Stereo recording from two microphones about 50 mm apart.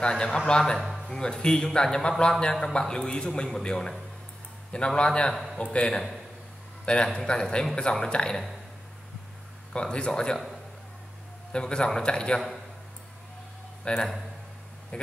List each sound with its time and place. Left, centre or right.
0.1 s speech: centre
0.7 s speech: centre
1.0 s speech: centre
5.3 s a man's voice: centre
5.6 s speech: left
9.7 s speech: centre
11.5 s speech: centre
13.9 s speech: left